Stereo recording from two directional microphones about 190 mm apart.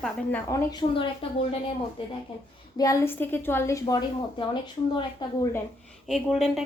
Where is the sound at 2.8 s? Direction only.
15° left (ahead or behind).